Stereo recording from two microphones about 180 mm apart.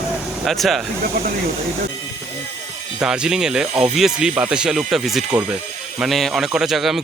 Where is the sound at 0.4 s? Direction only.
Centre (ahead or behind).